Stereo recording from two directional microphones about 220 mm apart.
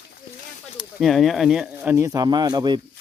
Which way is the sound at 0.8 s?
Centre (ahead or behind).